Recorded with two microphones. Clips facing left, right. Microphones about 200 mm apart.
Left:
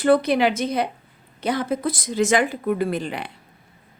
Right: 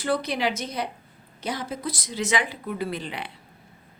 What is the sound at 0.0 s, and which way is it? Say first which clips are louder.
A woman's voice: left 8 dB; 55° left (ahead or behind).